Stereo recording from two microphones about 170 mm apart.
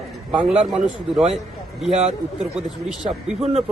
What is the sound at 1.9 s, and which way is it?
Speech, 40° right (ahead or behind).